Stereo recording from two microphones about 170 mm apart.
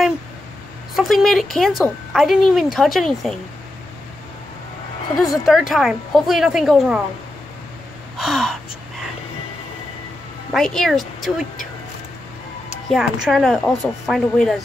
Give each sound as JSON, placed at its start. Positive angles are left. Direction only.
{"t": 0.9, "sound": "speech", "side_deg": 0}
{"t": 5.1, "sound": "a woman's voice", "side_deg": 20}
{"t": 5.4, "sound": "speech", "side_deg": 0}
{"t": 8.2, "sound": "gasp", "side_deg": 0}
{"t": 10.5, "sound": "speech", "side_deg": 0}
{"t": 12.9, "sound": "speech", "side_deg": 0}